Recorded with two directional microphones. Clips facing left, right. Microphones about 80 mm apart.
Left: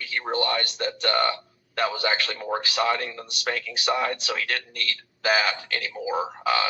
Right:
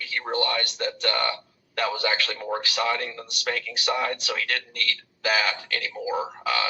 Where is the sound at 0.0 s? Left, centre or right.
Left.